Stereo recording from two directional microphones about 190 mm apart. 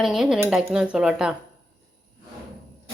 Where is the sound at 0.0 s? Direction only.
Centre (ahead or behind).